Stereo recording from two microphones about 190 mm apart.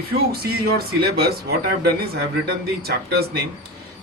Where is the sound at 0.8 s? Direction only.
55° right (ahead or behind).